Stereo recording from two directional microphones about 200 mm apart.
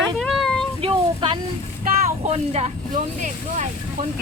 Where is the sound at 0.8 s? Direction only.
25° right (ahead or behind).